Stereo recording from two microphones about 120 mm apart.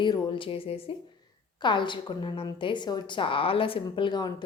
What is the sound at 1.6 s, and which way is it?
A woman's voice, 40° left (ahead or behind).